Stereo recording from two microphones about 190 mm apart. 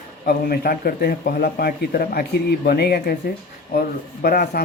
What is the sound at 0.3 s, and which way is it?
Speech, 50° left (ahead or behind).